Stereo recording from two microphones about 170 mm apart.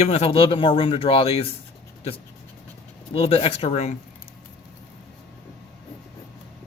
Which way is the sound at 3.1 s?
35° left (ahead or behind).